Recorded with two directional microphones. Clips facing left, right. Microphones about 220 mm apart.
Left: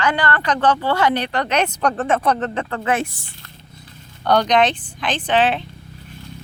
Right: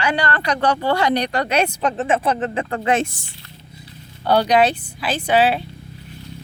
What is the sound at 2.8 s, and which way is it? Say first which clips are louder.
Speech: right 2 dB; 25° right (ahead or behind).